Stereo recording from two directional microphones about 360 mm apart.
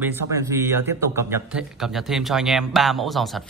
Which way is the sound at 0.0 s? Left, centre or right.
Centre.